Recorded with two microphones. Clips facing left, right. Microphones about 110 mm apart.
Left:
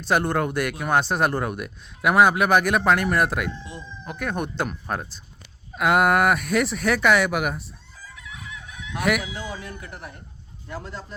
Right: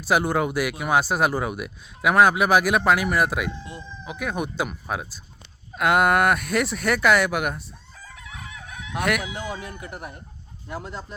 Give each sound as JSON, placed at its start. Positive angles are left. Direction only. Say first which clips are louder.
{"t": 0.0, "sound": "speech", "louder": "right 1 dB", "side_deg": -5}
{"t": 7.9, "sound": "chicken", "louder": "even", "side_deg": -50}
{"t": 9.0, "sound": "speech", "louder": "left 1 dB", "side_deg": 0}
{"t": 9.4, "sound": "speech", "louder": "right 2 dB", "side_deg": -20}